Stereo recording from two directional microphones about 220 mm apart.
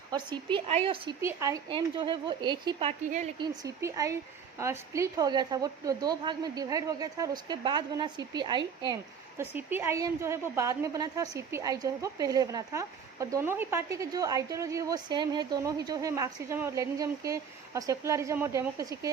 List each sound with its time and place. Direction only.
0.1 s speech: 20° right (ahead or behind)
1.2 s a woman's voice: 10° right (ahead or behind)
9.4 s a woman's voice: 10° right (ahead or behind)